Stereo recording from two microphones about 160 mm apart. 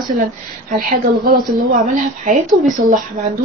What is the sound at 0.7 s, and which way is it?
Speech, 65° right (ahead or behind).